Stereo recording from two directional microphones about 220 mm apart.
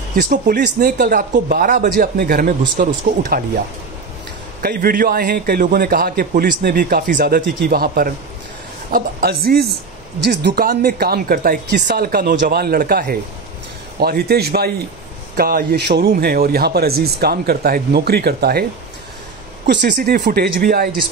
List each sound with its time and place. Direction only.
0.1 s a man's voice: 40° right (ahead or behind)